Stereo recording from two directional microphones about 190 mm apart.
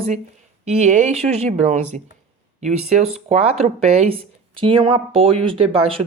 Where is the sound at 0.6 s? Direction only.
35° right (ahead or behind).